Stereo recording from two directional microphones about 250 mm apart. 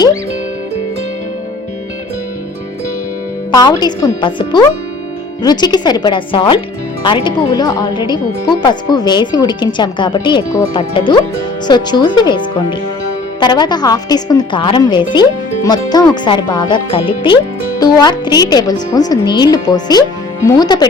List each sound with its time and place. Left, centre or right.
3.5 s speech: centre
13.4 s speech: centre